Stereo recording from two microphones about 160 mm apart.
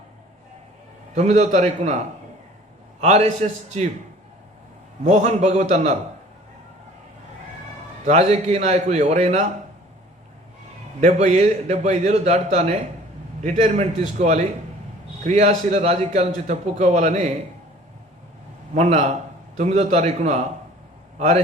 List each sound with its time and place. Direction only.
1.1 s a man's voice: 50° right (ahead or behind)
3.0 s a man's voice: 45° right (ahead or behind)
5.0 s a man's voice: 45° right (ahead or behind)
8.0 s a man's voice: 45° right (ahead or behind)
11.0 s a man's voice: 45° right (ahead or behind)
18.7 s a man's voice: 50° right (ahead or behind)